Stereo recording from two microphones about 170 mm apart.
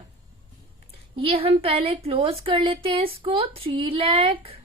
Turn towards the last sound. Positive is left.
turn(degrees=-30)  # may be behind; listen again after turning